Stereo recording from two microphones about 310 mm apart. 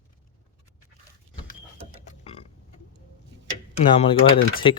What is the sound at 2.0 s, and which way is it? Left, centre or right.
Burping, centre.